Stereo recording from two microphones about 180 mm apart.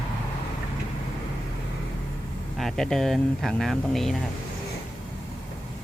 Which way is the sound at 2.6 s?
Centre (ahead or behind).